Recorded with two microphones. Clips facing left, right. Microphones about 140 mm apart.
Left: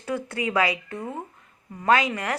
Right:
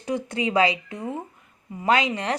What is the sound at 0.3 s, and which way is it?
A woman's voice, 20° right (ahead or behind).